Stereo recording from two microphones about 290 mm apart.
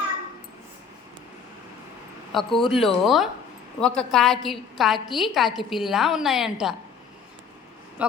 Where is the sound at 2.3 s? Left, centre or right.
Centre.